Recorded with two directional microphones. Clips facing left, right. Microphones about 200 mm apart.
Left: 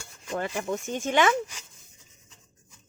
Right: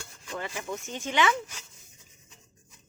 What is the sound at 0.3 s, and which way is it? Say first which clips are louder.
Speech: left 6 dB; 50° left (ahead or behind).